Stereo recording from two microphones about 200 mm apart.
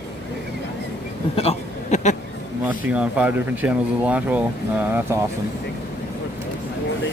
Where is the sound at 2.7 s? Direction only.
5° right (ahead or behind).